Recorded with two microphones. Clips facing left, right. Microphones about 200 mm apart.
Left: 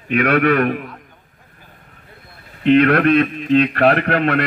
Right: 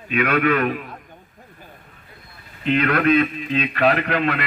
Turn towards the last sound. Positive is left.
turn(degrees=65)  # may be behind; listen again after turning